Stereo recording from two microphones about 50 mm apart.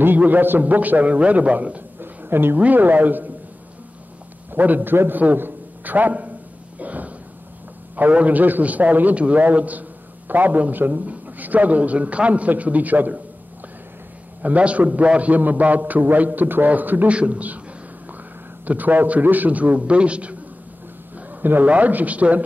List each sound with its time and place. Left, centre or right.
0.2 s a man's voice: right
2.0 s a sound: right
2.6 s a man's voice: right
4.5 s a man's voice: right
6.8 s a sound: right
7.9 s a man's voice: right
14.4 s a man's voice: right
17.1 s a man's voice: right
18.7 s a man's voice: right
21.3 s a man's voice: right